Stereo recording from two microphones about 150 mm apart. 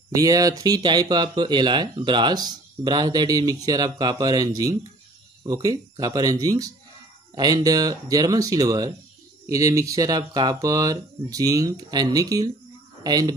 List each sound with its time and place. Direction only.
0.1 s speech: 25° right (ahead or behind)